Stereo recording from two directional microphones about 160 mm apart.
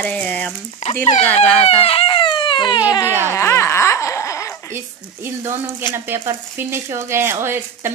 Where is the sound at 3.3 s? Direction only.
15° left (ahead or behind).